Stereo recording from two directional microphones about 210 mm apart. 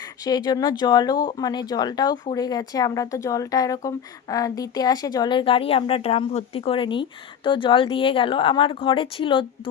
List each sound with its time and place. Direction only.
0.0 s speech: 20° left (ahead or behind)